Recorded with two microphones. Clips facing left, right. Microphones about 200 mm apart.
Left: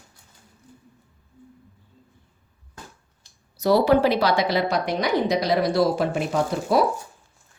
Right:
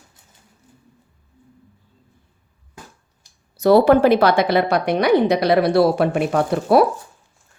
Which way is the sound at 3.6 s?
55° right (ahead or behind).